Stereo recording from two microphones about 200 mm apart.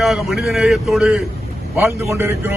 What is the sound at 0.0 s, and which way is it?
A man's voice, centre (ahead or behind).